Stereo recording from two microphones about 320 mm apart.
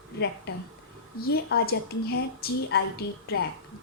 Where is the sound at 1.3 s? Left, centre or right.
Left.